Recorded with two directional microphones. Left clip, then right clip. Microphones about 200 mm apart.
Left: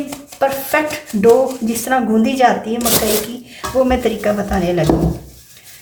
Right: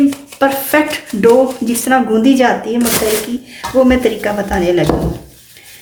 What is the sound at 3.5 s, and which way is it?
Speech, 35° right (ahead or behind).